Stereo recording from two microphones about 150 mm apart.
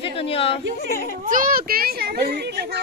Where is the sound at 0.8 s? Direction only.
90° left.